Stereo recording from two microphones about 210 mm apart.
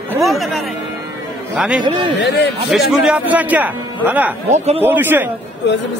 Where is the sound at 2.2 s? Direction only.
55° left (ahead or behind).